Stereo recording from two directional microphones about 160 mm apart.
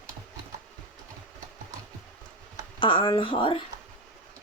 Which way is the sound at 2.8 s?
30° left (ahead or behind).